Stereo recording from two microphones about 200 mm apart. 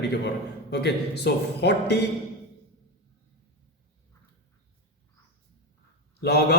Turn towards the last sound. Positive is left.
turn(degrees=55)  # may be behind; listen again after turning